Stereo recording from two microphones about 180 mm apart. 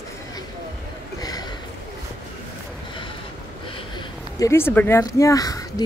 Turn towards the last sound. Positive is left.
turn(degrees=20)  # may be behind; listen again after turning